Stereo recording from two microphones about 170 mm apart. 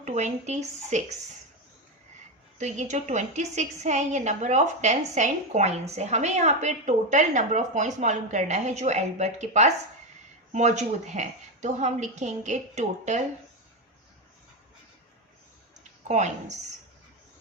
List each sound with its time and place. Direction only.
0.0 s a woman's voice: 45° right (ahead or behind)
2.6 s a woman's voice: 45° right (ahead or behind)
16.0 s a woman's voice: 45° right (ahead or behind)